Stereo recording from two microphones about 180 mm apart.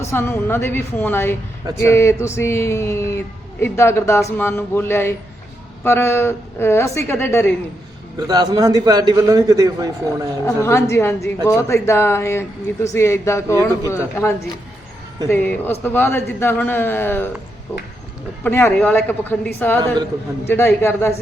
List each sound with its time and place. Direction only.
0.0 s speech: 15° left (ahead or behind)
8.3 s a man's voice: 20° right (ahead or behind)
10.4 s speech: 15° left (ahead or behind)
18.4 s speech: 10° left (ahead or behind)